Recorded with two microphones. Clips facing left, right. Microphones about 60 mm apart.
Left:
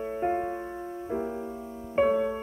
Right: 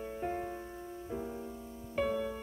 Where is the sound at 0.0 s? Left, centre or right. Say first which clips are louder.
Left 9 dB; left.